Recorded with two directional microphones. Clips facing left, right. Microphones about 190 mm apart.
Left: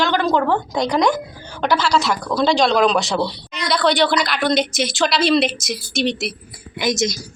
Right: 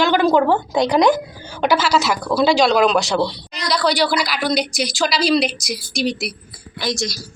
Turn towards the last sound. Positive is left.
turn(degrees=20)  # may be behind; listen again after turning